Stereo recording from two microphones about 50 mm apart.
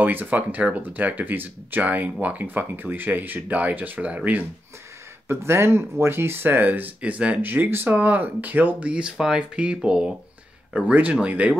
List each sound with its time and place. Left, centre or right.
0.0 s speech: right
5.4 s speech: right
7.0 s speech: right
7.4 s speech: right
8.8 s speech: centre
10.8 s speech: right